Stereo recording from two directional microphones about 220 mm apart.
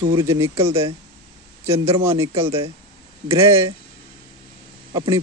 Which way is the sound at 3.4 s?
10° right (ahead or behind).